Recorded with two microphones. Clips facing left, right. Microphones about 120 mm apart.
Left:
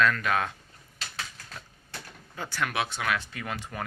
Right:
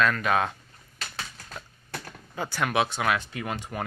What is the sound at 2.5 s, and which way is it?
Speech, 20° right (ahead or behind).